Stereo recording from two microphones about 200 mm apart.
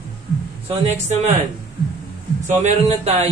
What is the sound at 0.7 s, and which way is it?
Speech, 35° right (ahead or behind).